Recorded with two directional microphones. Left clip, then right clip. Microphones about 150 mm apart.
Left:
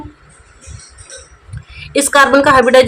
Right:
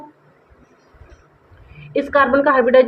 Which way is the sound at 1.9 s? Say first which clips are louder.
Left 6 dB; 40° left (ahead or behind).